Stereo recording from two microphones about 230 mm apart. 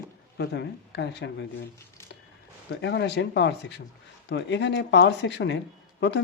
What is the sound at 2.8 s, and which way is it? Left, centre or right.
Speech, left.